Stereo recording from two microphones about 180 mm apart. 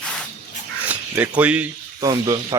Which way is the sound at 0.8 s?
10° right (ahead or behind).